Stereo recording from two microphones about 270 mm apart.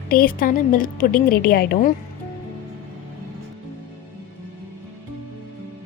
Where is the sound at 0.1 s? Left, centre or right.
Left.